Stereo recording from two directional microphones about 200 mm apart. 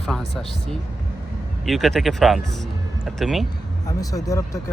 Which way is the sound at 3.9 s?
15° left (ahead or behind).